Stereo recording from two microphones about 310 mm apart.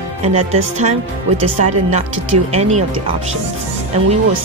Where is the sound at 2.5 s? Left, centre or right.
Right.